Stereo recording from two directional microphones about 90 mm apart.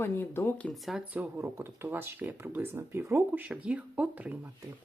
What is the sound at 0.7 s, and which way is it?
Speech, centre (ahead or behind).